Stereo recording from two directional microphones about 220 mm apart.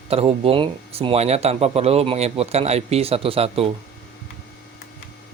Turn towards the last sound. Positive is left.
turn(degrees=-25)  # may be behind; listen again after turning